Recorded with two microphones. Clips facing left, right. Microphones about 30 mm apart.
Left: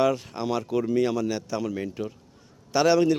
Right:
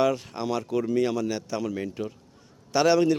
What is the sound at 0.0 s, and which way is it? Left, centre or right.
A man's voice, centre.